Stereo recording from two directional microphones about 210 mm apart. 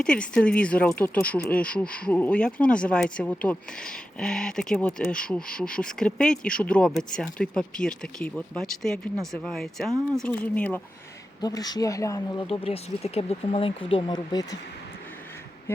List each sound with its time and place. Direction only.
0.0 s speech: 5° left (ahead or behind)
11.3 s speech: 20° left (ahead or behind)
12.5 s speech: 30° left (ahead or behind)